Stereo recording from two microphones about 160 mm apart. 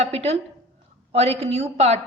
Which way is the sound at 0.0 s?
40° right (ahead or behind).